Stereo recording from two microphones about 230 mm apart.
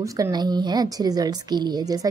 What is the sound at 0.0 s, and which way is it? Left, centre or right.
A woman's voice, centre.